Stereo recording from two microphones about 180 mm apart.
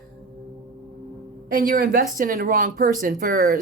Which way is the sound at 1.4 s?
50° right (ahead or behind).